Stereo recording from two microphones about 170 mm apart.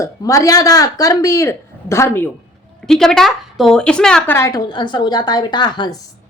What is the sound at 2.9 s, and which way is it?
A woman's voice, 5° left (ahead or behind).